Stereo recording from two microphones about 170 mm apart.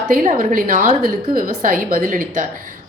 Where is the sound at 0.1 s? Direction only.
50° right (ahead or behind).